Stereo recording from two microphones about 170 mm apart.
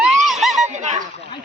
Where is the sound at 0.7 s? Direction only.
45° right (ahead or behind).